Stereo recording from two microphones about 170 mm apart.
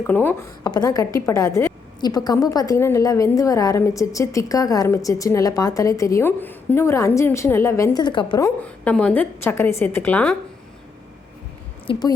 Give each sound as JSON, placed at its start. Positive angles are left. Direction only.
{"t": 0.1, "sound": "a woman's voice", "side_deg": 10}
{"t": 0.7, "sound": "a woman's voice", "side_deg": 20}
{"t": 8.6, "sound": "a woman's voice", "side_deg": 10}
{"t": 11.9, "sound": "a woman's voice", "side_deg": 25}